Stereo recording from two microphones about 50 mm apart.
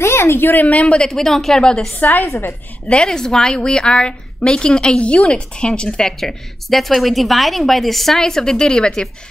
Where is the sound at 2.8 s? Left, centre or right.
Centre.